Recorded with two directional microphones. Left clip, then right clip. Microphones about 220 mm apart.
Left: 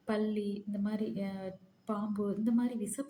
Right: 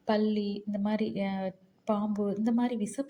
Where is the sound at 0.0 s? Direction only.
30° right (ahead or behind).